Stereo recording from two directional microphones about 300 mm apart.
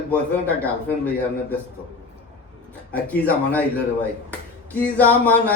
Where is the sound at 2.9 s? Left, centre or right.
Centre.